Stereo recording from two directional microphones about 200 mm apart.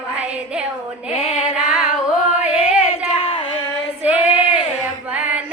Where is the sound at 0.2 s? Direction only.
5° right (ahead or behind).